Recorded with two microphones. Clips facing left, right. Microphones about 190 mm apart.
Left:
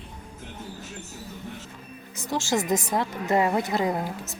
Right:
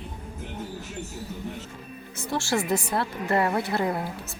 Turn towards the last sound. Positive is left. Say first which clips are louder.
# left 1 dB
turn(degrees=15)  # may be behind; listen again after turning